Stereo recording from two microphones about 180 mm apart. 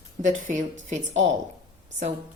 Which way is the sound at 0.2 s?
45° right (ahead or behind).